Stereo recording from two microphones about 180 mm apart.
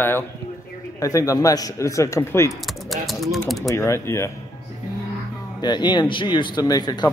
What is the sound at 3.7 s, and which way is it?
Speech, 15° left (ahead or behind).